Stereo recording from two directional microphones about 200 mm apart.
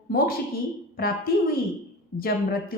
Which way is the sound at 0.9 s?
50° left (ahead or behind).